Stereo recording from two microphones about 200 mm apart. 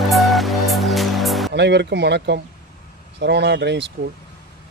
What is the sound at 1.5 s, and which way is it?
Speech, 60° right (ahead or behind).